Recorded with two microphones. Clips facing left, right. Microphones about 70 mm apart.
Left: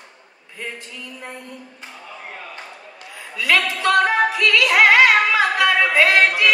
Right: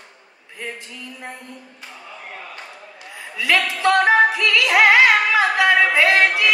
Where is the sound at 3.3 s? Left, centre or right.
Right.